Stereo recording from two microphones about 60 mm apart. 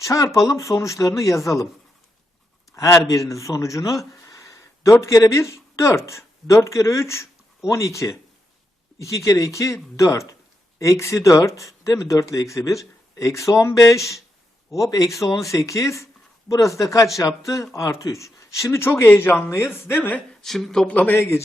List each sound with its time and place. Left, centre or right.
0.0 s speech: left
2.7 s speech: left
14.7 s speech: left
19.5 s speech: left
20.4 s speech: centre
20.8 s a man's voice: left
21.2 s speech: left